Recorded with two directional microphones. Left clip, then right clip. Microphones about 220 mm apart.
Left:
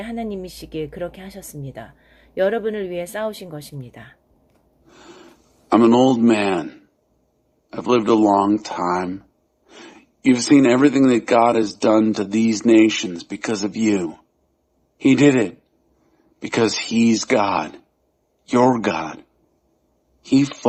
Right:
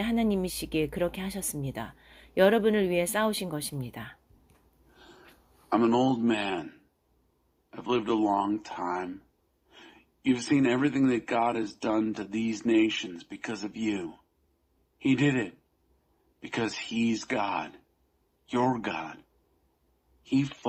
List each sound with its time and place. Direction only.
0.0 s speech: 30° right (ahead or behind)
4.9 s a sound: 50° left (ahead or behind)
5.6 s speech: 50° left (ahead or behind)
20.2 s speech: 50° left (ahead or behind)